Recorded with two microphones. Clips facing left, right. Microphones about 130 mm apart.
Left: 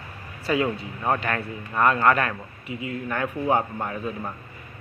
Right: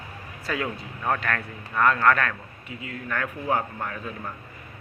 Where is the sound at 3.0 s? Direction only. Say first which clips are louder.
Left 3 dB; 20° left (ahead or behind).